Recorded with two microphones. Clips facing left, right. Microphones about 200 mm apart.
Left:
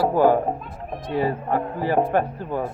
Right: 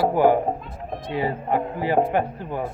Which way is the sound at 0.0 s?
20° right (ahead or behind).